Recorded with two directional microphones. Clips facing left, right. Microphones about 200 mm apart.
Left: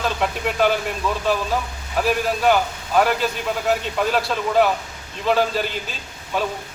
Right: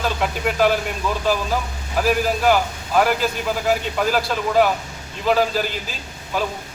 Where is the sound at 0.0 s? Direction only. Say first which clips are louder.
Right 1 dB; centre (ahead or behind).